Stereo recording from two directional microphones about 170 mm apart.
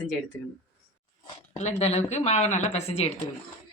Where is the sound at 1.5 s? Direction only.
40° left (ahead or behind).